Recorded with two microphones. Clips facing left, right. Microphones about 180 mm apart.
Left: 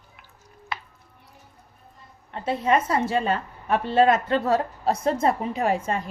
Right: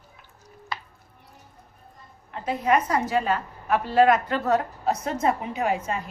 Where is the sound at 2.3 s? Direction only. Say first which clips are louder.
Left 1 dB; 30° left (ahead or behind).